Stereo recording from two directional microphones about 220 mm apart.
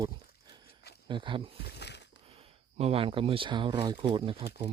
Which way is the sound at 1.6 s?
50° left (ahead or behind).